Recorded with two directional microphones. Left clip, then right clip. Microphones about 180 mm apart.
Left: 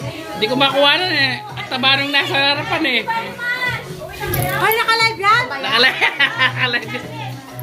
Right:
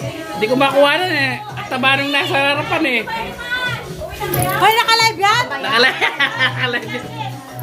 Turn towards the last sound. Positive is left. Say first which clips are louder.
# left 1 dB
turn(degrees=-5)  # may be behind; listen again after turning